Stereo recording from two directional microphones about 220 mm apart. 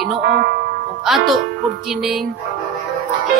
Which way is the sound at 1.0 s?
Centre (ahead or behind).